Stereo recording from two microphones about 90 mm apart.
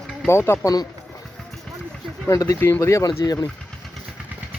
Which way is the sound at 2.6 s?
30° left (ahead or behind).